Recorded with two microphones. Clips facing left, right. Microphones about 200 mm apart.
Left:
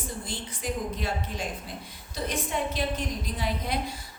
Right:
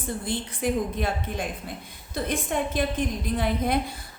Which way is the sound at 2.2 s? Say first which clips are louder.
Right 2 dB; 50° right (ahead or behind).